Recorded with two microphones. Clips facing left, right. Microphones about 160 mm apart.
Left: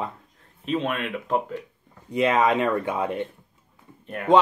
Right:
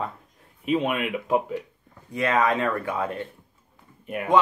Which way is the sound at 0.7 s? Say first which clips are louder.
Right 2 dB; 10° right (ahead or behind).